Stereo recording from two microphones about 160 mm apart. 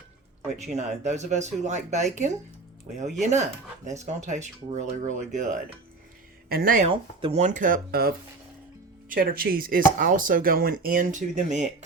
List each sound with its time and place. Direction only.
1.0 s speech: 45° right (ahead or behind)
6.5 s speech: 60° right (ahead or behind)
6.8 s speech: 35° right (ahead or behind); by 11.7 s 50° right (ahead or behind)